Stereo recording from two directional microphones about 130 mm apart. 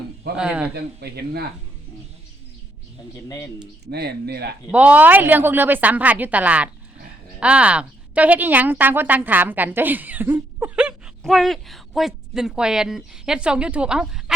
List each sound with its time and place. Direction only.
0.3 s a woman's voice: 10° right (ahead or behind)
3.2 s a man's voice: 25° left (ahead or behind)
4.7 s a woman's voice: 10° right (ahead or behind)